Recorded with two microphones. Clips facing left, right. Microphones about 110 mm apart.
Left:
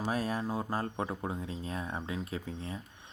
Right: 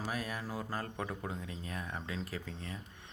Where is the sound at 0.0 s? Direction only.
30° left (ahead or behind).